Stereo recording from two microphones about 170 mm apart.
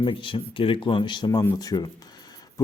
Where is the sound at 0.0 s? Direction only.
30° left (ahead or behind).